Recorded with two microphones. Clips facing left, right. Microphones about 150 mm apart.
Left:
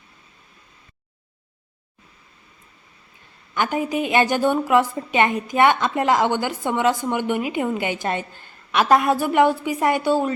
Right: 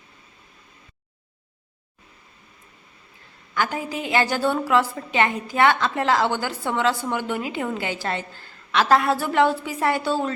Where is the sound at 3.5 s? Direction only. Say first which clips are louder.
Left 4 dB; 20° left (ahead or behind).